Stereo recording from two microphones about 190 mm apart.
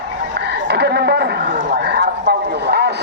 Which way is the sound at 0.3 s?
60° right (ahead or behind).